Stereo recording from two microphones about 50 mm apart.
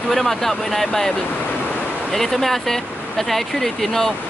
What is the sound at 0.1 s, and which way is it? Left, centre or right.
Speech, centre.